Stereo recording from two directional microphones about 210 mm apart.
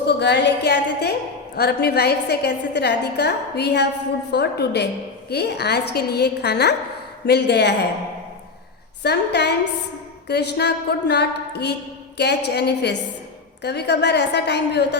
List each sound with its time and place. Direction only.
0.0 s a woman's voice: 50° left (ahead or behind)
9.0 s a woman's voice: 55° left (ahead or behind)